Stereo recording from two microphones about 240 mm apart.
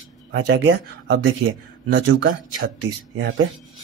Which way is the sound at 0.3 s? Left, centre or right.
Right.